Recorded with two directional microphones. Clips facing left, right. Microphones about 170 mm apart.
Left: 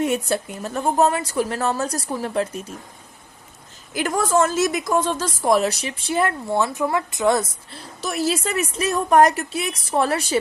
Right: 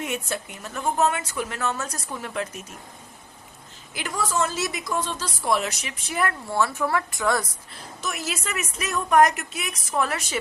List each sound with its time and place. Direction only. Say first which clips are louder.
0.0 s a woman's voice: left 8 dB; 35° left (ahead or behind)
3.9 s a woman's voice: left 7 dB; 50° left (ahead or behind); by 10.4 s 35° left (ahead or behind)